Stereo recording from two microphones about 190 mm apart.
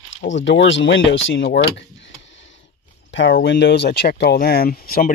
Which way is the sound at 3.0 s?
75° left (ahead or behind).